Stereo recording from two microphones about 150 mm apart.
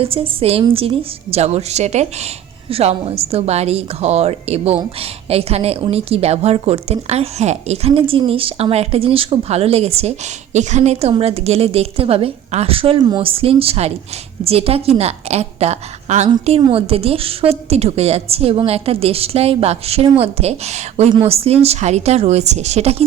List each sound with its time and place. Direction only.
0.0 s a woman's voice: 40° right (ahead or behind)
16.5 s a woman's voice: 35° right (ahead or behind)